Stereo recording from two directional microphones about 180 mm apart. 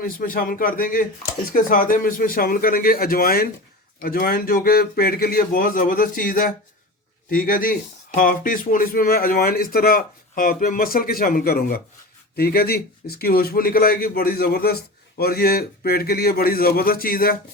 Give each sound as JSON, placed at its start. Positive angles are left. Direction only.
{"t": 0.0, "sound": "speech", "side_deg": 50}